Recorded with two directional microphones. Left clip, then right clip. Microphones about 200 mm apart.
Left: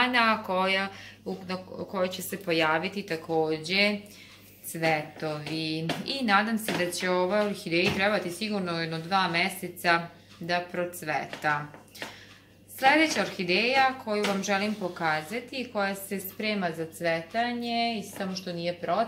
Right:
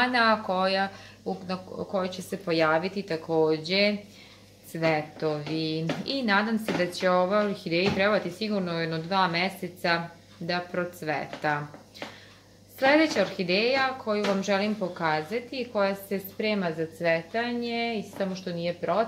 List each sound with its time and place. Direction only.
0.0 s a woman's voice: 30° right (ahead or behind)
12.7 s speech: 50° right (ahead or behind)